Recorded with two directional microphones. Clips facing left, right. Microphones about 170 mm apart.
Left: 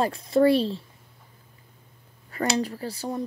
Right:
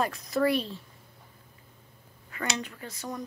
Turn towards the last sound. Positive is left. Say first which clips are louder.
# left 7 dB
turn(degrees=30)  # may be behind; listen again after turning